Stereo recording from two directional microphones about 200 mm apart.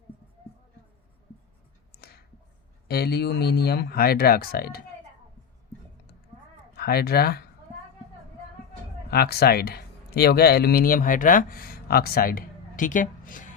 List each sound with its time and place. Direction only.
1.9 s whispering: 50° left (ahead or behind)
2.8 s speech: 50° left (ahead or behind)
6.7 s speech: 50° left (ahead or behind)
9.0 s speech: 50° left (ahead or behind)